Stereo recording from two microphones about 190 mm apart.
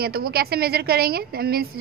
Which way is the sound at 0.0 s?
55° right (ahead or behind).